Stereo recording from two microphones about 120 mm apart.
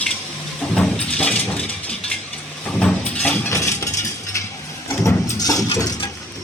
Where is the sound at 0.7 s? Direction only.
5° left (ahead or behind).